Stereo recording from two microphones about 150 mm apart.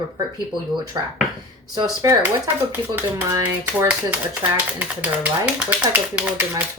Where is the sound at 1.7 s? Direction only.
25° right (ahead or behind).